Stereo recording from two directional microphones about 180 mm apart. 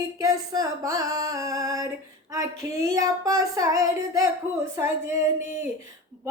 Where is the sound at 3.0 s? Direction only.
20° right (ahead or behind).